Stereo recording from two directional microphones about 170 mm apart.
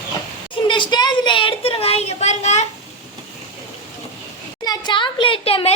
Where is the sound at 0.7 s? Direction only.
25° left (ahead or behind); by 2.6 s 40° left (ahead or behind).